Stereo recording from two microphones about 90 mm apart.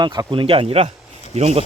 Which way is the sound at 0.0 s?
55° right (ahead or behind).